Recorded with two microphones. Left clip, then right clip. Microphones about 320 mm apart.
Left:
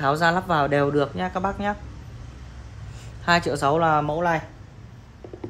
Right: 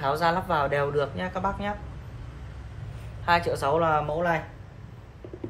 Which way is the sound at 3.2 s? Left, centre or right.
Left.